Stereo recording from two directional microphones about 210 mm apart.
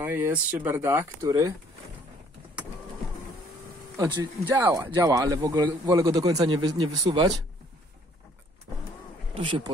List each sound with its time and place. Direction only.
0.0 s a man's voice: 10° right (ahead or behind)
3.9 s vehicle: 15° right (ahead or behind)
4.5 s a man's voice: 10° right (ahead or behind)
9.3 s speech: 25° right (ahead or behind)